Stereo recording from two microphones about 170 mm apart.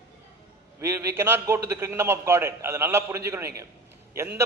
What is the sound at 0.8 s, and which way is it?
A man's voice, 15° right (ahead or behind).